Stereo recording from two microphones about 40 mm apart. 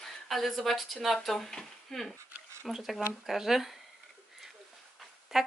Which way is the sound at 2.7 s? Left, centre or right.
Centre.